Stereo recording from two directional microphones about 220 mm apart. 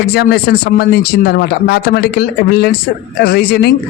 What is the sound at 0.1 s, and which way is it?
A man's voice, 45° left (ahead or behind).